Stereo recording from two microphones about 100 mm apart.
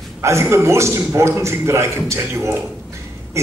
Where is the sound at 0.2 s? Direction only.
25° right (ahead or behind).